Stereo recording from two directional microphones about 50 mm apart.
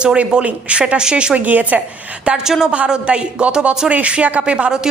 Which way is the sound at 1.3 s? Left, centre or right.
Right.